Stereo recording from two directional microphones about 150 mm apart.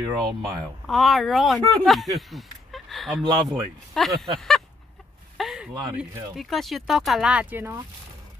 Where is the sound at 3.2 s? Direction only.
25° right (ahead or behind).